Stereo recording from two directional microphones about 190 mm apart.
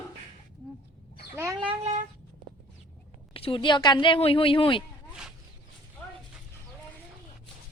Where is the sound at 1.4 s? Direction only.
15° right (ahead or behind).